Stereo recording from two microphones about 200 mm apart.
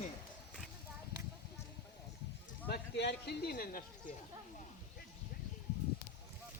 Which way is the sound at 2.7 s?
55° left (ahead or behind).